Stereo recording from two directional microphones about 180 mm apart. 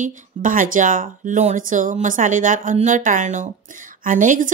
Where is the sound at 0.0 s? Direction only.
45° right (ahead or behind).